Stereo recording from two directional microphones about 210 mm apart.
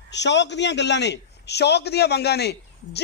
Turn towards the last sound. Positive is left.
turn(degrees=50)  # may be behind; listen again after turning